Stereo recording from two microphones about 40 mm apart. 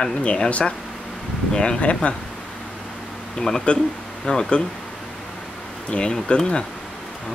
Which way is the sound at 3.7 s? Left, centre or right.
Left.